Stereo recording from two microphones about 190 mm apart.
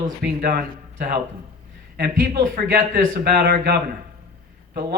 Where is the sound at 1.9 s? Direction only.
55° right (ahead or behind).